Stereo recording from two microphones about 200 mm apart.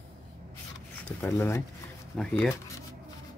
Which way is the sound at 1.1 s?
10° left (ahead or behind).